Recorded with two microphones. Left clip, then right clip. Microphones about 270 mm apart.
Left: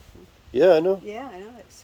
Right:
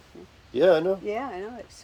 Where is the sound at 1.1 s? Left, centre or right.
Centre.